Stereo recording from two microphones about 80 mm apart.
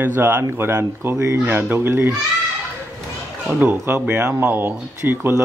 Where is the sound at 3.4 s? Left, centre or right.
Right.